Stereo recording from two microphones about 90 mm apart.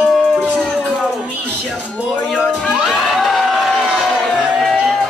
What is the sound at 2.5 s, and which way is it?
Crowd, 10° left (ahead or behind).